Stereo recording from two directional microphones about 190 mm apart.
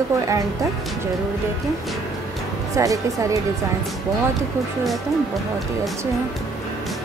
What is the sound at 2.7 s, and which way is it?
Speech, 15° right (ahead or behind).